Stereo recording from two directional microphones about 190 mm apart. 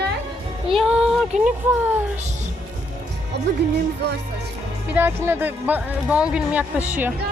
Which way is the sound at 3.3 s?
60° right (ahead or behind).